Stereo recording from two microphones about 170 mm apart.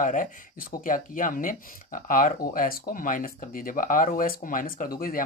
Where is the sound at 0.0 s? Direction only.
50° left (ahead or behind).